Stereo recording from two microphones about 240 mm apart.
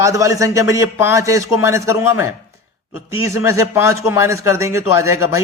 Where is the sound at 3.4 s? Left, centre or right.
Centre.